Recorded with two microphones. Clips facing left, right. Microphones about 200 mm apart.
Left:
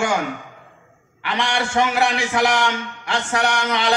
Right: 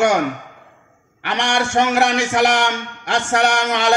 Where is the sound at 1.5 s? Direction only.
45° right (ahead or behind).